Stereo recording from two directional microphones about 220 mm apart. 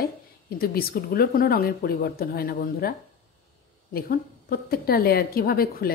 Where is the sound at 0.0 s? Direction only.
45° left (ahead or behind).